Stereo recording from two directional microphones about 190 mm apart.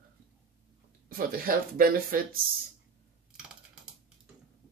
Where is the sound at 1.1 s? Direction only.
50° right (ahead or behind).